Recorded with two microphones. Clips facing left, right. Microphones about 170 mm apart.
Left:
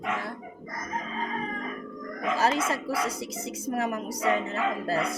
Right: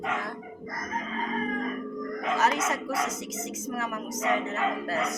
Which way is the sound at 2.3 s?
30° left (ahead or behind).